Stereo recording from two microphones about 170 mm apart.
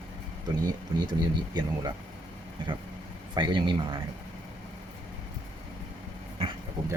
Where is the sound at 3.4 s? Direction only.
25° right (ahead or behind).